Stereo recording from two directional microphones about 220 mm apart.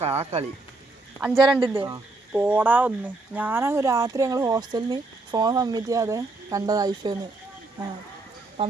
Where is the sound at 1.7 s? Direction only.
20° right (ahead or behind).